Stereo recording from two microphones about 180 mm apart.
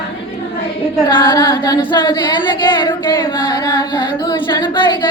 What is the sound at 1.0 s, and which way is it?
Singing, 20° left (ahead or behind).